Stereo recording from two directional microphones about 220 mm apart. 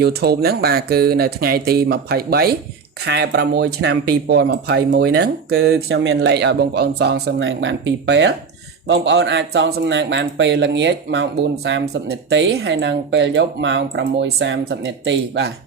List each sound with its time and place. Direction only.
0.0 s speech: 45° right (ahead or behind)